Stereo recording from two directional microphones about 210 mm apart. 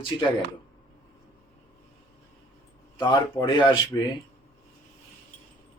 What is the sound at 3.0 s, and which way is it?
Speech, 20° left (ahead or behind).